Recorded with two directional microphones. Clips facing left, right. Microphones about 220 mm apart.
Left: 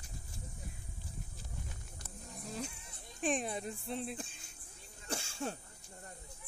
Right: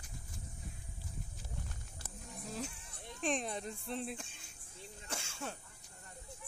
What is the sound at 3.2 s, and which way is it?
Speech, 5° left (ahead or behind).